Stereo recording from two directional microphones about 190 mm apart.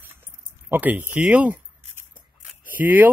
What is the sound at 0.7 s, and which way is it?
Speech, 10° right (ahead or behind).